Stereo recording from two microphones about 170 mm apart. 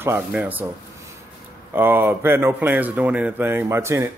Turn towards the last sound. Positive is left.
turn(degrees=-15)  # may be behind; listen again after turning